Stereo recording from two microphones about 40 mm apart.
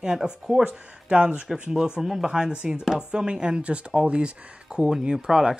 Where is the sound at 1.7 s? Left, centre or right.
Centre.